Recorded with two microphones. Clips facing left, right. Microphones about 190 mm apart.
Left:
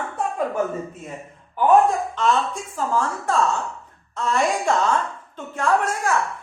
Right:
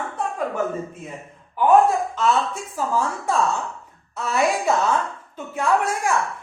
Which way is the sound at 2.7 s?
10° right (ahead or behind).